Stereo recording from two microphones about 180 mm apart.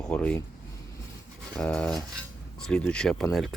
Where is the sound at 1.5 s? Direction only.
5° left (ahead or behind).